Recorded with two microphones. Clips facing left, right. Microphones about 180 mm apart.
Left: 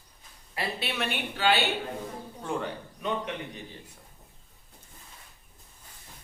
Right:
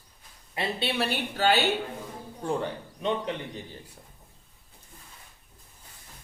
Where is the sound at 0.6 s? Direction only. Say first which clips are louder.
Right 3 dB; 30° right (ahead or behind).